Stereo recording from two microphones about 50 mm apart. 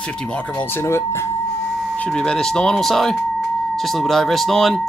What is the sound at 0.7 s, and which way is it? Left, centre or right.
Speech, left.